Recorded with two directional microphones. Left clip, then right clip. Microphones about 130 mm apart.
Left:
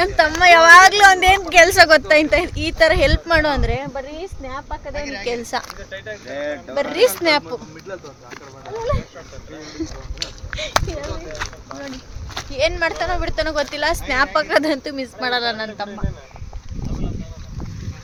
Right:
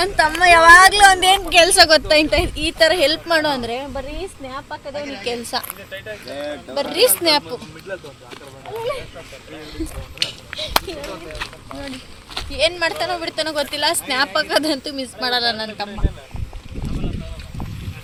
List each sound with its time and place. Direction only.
0.0 s a woman's voice: 75° left (ahead or behind)
1.5 s speech: 35° left (ahead or behind); by 5.0 s 10° left (ahead or behind)
5.2 s speech: 20° left (ahead or behind)
7.9 s speech: 20° right (ahead or behind)
11.4 s a sound: centre (ahead or behind)
12.5 s speech: 15° left (ahead or behind)